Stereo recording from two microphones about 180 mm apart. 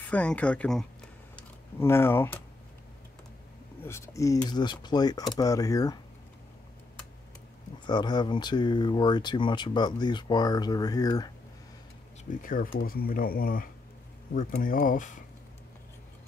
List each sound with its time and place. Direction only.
0.1 s speech: 10° left (ahead or behind)
3.8 s speech: 15° left (ahead or behind)
7.8 s speech: 25° left (ahead or behind)
12.3 s speech: 50° left (ahead or behind)